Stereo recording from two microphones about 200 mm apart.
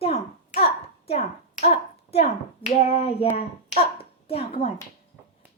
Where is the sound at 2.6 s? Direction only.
30° left (ahead or behind).